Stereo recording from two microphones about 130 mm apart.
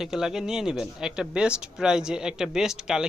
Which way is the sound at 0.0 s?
5° right (ahead or behind).